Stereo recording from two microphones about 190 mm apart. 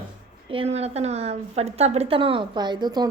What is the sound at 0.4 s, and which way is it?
A woman's voice, 30° right (ahead or behind).